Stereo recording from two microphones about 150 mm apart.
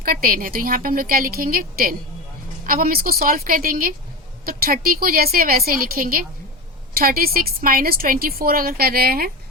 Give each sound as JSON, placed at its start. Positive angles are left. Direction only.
{"t": 0.0, "sound": "a woman's voice", "side_deg": -75}
{"t": 7.0, "sound": "a woman's voice", "side_deg": -85}